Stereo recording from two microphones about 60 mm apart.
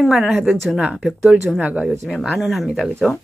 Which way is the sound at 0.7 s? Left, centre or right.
Centre.